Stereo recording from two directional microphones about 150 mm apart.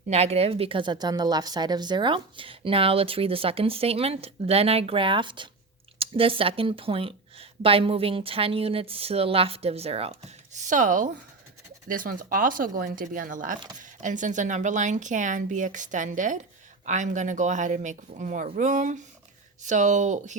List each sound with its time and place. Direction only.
0.1 s a woman's voice: 45° right (ahead or behind)